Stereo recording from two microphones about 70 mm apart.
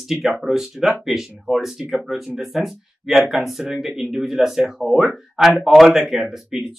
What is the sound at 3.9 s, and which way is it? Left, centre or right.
Speech, centre.